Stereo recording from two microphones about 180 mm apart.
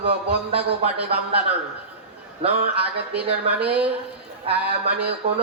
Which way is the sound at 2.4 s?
35° right (ahead or behind).